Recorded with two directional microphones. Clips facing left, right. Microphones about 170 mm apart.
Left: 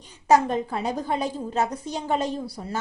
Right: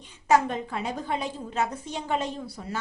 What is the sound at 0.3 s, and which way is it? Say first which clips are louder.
A woman's voice: left 3 dB; 40° left (ahead or behind).